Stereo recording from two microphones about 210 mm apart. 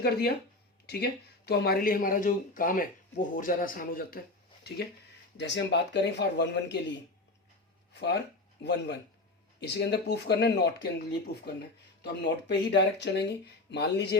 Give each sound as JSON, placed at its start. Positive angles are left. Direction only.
{"t": 0.0, "sound": "speech", "side_deg": 45}
{"t": 5.4, "sound": "speech", "side_deg": 55}
{"t": 7.9, "sound": "speech", "side_deg": 55}
{"t": 12.0, "sound": "speech", "side_deg": 55}